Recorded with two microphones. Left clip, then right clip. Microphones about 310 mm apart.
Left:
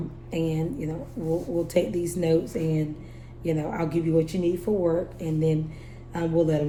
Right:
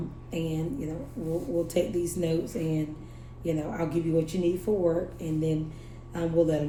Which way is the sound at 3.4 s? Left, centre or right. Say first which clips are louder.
Left 3 dB; left.